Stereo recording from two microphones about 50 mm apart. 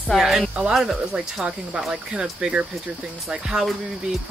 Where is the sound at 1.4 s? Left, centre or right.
Centre.